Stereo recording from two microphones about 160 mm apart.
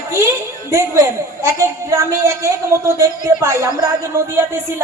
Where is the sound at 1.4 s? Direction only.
20° right (ahead or behind).